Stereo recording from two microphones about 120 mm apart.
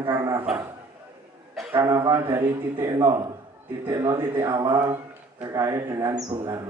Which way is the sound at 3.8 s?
20° right (ahead or behind).